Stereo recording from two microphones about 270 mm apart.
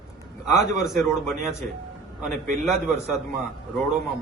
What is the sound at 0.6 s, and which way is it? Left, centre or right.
A man's voice, centre.